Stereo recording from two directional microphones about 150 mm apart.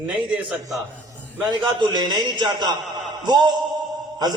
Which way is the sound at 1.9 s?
30° right (ahead or behind).